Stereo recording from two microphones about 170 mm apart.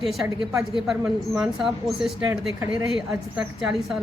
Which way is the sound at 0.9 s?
5° right (ahead or behind).